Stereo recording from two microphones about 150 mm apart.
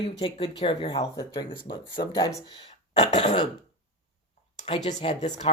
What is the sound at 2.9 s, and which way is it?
Speech, 50° left (ahead or behind).